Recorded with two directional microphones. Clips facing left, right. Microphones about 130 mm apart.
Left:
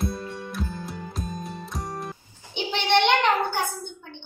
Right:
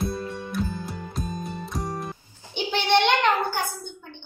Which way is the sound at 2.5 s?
20° left (ahead or behind).